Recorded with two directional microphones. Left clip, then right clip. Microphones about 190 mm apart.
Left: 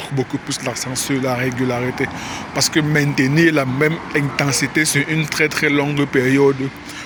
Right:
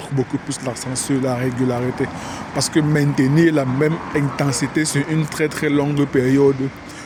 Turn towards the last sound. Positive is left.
turn(degrees=-20)  # may be behind; listen again after turning